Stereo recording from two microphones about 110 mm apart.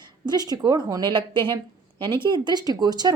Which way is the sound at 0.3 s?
40° right (ahead or behind).